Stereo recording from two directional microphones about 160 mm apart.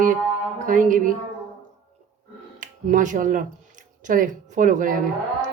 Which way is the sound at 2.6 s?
55° right (ahead or behind).